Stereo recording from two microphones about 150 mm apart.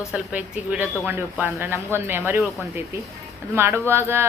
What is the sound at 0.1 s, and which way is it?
A woman's voice, 10° right (ahead or behind).